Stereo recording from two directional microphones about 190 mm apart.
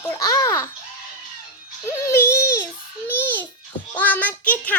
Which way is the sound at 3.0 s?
10° left (ahead or behind).